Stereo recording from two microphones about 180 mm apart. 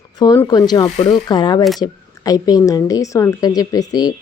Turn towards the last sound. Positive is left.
turn(degrees=20)  # may be behind; listen again after turning